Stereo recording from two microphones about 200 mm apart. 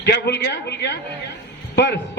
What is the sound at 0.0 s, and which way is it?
A man's voice, 55° left (ahead or behind).